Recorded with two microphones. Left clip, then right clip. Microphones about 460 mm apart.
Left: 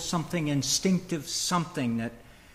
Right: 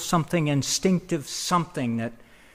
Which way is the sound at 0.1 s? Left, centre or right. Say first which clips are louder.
Right 7 dB; right.